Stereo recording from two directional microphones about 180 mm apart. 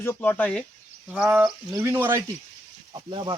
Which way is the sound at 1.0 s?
5° right (ahead or behind).